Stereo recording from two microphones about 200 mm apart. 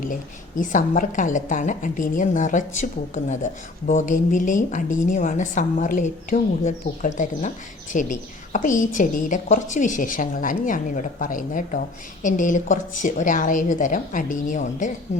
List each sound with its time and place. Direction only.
0.6 s a woman's voice: 40° left (ahead or behind)